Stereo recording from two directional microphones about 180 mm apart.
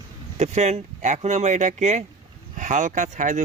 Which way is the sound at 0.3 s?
40° right (ahead or behind).